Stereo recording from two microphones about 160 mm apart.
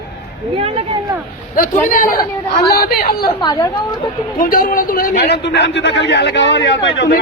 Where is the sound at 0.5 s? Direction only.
35° right (ahead or behind).